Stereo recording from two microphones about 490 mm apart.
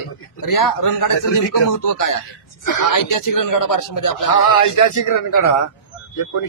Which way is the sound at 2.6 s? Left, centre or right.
Left.